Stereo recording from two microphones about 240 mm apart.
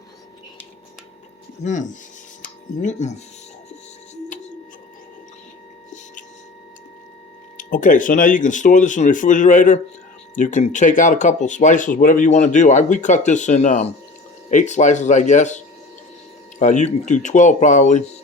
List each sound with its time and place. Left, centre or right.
1.6 s speech: left
2.4 s music: left
7.5 s speech: left